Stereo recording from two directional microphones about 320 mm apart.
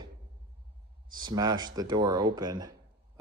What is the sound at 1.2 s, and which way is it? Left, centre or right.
Speech, centre.